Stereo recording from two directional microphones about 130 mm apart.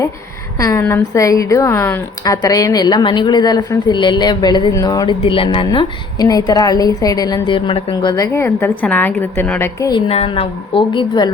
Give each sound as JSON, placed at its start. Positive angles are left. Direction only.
{"t": 0.6, "sound": "a woman's voice", "side_deg": 25}
{"t": 5.2, "sound": "a woman's voice", "side_deg": 45}
{"t": 5.6, "sound": "a woman's voice", "side_deg": 30}
{"t": 8.3, "sound": "a woman's voice", "side_deg": 15}
{"t": 10.1, "sound": "a woman's voice", "side_deg": 50}